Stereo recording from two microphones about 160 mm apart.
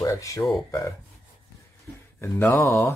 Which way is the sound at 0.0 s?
20° left (ahead or behind).